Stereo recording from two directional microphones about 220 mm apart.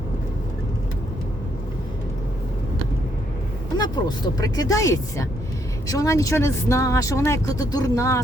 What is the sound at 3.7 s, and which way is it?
Speech, 20° left (ahead or behind).